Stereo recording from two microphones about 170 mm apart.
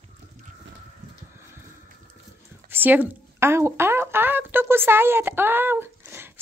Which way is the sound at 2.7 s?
10° right (ahead or behind).